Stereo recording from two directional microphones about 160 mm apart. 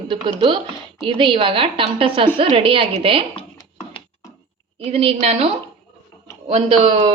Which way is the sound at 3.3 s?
35° left (ahead or behind).